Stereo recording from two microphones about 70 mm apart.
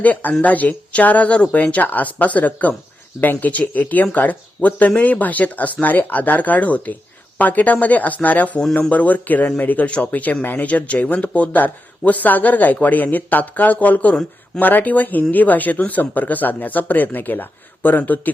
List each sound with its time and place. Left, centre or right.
0.0 s speech: left